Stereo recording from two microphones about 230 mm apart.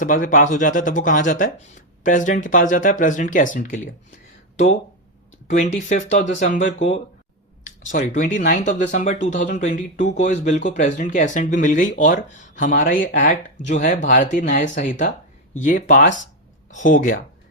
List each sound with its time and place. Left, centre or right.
0.0 s speech: left
5.7 s speech: left
6.7 s speech: left
7.6 s speech: left